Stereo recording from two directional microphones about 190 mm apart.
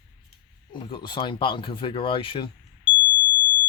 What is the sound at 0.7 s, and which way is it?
Speech, 25° left (ahead or behind).